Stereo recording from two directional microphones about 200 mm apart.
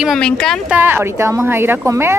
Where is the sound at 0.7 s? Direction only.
10° right (ahead or behind).